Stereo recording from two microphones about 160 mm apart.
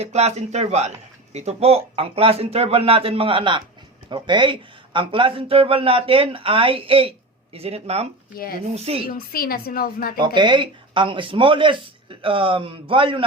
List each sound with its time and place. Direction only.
0.0 s a man's voice: 40° right (ahead or behind)
9.0 s a woman's voice: 65° left (ahead or behind)
10.2 s a man's voice: 30° right (ahead or behind)